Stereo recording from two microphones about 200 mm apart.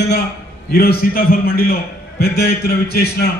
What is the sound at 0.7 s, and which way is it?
A man's voice, 50° left (ahead or behind).